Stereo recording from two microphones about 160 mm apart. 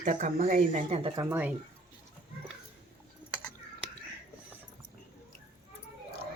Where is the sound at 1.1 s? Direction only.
20° right (ahead or behind).